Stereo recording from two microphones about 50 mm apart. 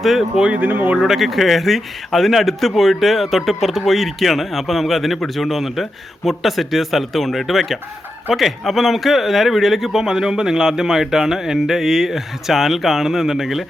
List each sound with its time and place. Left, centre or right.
0.0 s a man's voice: centre
0.4 s speech: right
0.9 s a man's voice: centre